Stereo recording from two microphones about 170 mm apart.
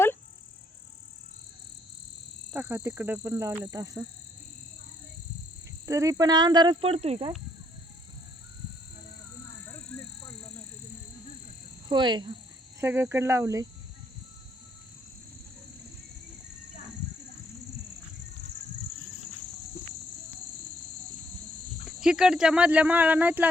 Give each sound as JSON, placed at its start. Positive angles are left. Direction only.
{"t": 2.5, "sound": "speech", "side_deg": -10}
{"t": 5.8, "sound": "speech", "side_deg": -20}
{"t": 11.9, "sound": "speech", "side_deg": -25}
{"t": 12.8, "sound": "speech", "side_deg": -15}
{"t": 21.8, "sound": "speech", "side_deg": -5}